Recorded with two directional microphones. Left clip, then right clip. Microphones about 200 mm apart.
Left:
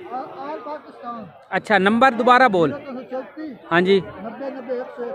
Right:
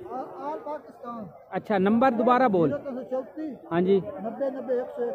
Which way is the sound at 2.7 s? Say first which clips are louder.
Left 1 dB; 25° right (ahead or behind).